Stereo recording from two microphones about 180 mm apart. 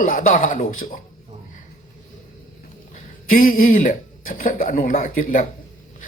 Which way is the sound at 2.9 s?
50° left (ahead or behind).